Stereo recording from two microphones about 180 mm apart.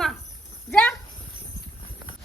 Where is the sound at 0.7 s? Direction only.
10° left (ahead or behind).